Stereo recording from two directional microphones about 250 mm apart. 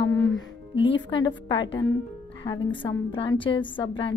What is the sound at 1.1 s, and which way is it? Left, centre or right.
A woman's voice, centre.